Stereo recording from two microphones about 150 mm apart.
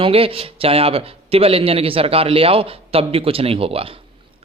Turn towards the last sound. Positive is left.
turn(degrees=-40)  # may be behind; listen again after turning